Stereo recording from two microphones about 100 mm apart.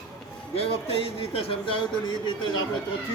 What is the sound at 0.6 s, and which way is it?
Speech, 75° left (ahead or behind).